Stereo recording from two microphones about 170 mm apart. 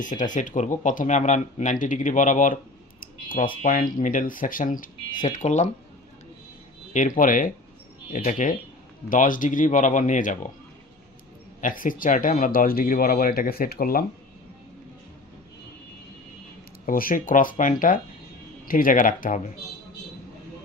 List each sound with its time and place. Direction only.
0.0 s speech: 50° left (ahead or behind)
3.0 s a sound: 55° left (ahead or behind)
3.6 s speech: 50° left (ahead or behind)
6.9 s speech: 50° left (ahead or behind)
11.6 s speech: 50° left (ahead or behind)
16.8 s speech: 55° left (ahead or behind)